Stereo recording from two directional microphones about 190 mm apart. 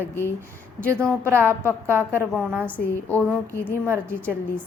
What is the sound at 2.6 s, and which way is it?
Speech, 10° left (ahead or behind).